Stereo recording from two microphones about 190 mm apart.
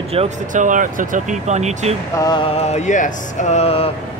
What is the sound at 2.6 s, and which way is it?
Music, 35° left (ahead or behind).